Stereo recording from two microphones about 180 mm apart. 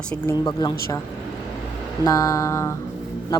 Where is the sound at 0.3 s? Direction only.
25° left (ahead or behind).